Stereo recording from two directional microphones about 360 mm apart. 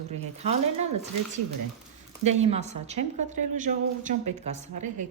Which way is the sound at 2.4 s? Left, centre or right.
Centre.